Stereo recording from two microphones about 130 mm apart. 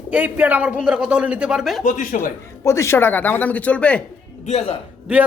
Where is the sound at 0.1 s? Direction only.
10° right (ahead or behind).